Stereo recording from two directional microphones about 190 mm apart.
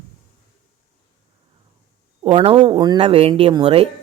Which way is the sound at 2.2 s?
30° right (ahead or behind).